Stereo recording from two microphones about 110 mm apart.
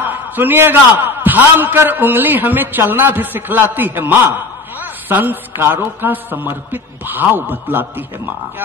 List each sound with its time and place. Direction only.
0.0 s a man's voice: 15° right (ahead or behind)